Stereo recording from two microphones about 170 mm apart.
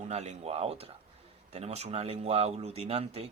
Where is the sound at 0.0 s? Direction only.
40° right (ahead or behind).